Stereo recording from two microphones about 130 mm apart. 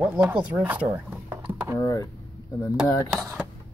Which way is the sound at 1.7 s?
30° left (ahead or behind).